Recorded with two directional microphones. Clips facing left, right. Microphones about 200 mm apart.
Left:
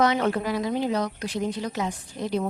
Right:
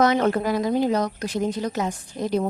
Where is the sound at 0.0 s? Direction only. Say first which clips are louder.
Right 3 dB; 45° right (ahead or behind).